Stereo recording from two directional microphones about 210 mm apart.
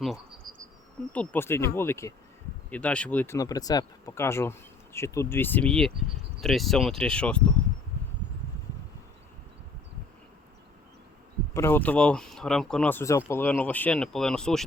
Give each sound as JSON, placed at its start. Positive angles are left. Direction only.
{"t": 0.4, "sound": "insect", "side_deg": -40}
{"t": 1.1, "sound": "speech", "side_deg": 5}
{"t": 11.5, "sound": "speech", "side_deg": 10}